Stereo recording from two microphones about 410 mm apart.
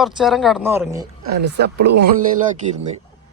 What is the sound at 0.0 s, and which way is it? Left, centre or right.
Speech, centre.